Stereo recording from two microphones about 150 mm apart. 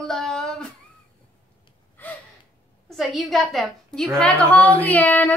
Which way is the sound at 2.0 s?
10° left (ahead or behind).